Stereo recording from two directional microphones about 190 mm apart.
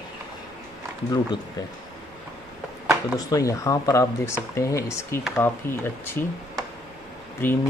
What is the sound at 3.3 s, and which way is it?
A man's voice, 15° left (ahead or behind).